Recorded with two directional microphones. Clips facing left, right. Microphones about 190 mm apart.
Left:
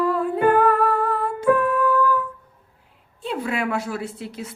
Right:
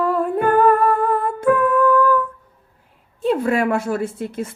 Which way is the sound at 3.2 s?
50° right (ahead or behind).